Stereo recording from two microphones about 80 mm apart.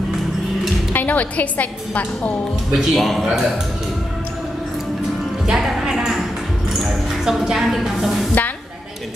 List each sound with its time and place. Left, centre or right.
0.9 s a woman's voice: centre
2.7 s a man's voice: centre
5.5 s music: centre
6.7 s a woman's voice: centre